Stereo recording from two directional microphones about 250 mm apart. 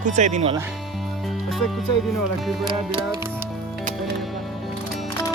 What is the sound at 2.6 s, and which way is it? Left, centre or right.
Music, centre.